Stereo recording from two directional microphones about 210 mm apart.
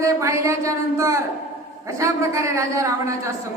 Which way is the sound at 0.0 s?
15° right (ahead or behind).